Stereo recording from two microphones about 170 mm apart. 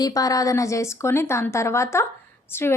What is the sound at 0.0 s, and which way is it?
A woman's voice, 20° left (ahead or behind).